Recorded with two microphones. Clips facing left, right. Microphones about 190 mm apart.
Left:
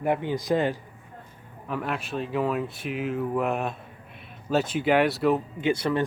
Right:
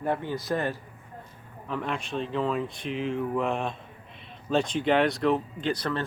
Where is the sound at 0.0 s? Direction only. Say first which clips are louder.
Left 3 dB; 15° left (ahead or behind).